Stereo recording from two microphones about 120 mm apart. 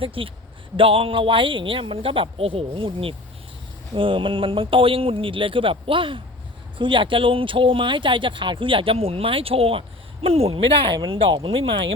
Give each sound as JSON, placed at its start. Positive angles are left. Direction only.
{"t": 0.0, "sound": "speech", "side_deg": -50}